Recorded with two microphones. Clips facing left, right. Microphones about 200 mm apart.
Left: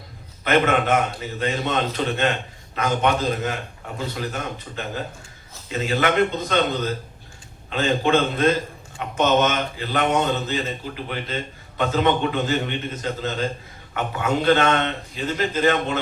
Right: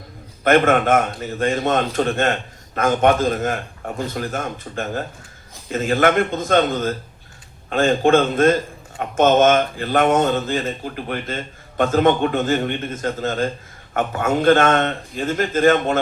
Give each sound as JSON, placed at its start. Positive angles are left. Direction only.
{"t": 0.4, "sound": "speech", "side_deg": -50}